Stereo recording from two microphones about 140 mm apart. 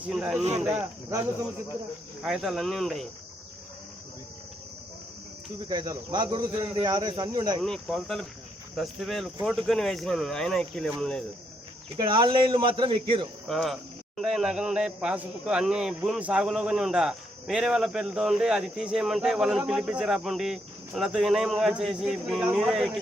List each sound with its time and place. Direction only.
0.1 s a man's voice: 5° right (ahead or behind)
2.2 s a man's voice: centre (ahead or behind)
5.6 s speech: 25° right (ahead or behind)
7.6 s a man's voice: 5° left (ahead or behind)
11.9 s speech: 35° right (ahead or behind)
13.5 s a man's voice: centre (ahead or behind)